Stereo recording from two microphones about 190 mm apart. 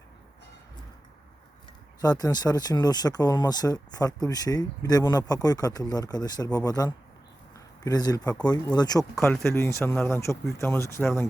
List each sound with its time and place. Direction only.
2.0 s speech: 20° left (ahead or behind)